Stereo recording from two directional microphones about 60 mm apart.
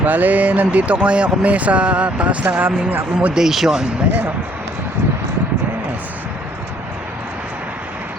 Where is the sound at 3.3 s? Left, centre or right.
Centre.